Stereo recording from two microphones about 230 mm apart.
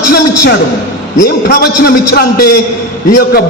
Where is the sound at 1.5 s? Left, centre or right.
Left.